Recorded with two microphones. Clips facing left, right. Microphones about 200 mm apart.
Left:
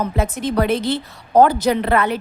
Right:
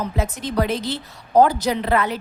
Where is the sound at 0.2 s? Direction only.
60° left (ahead or behind).